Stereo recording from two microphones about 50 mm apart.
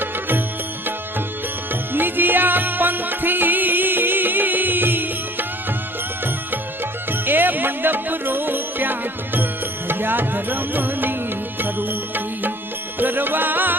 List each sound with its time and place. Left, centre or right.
0.0 s music: right
1.9 s music: right
7.1 s music: right